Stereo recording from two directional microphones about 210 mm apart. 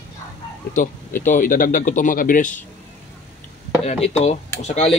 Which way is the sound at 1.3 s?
40° left (ahead or behind).